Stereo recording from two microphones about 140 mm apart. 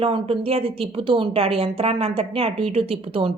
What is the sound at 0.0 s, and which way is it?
A woman's voice, 40° right (ahead or behind).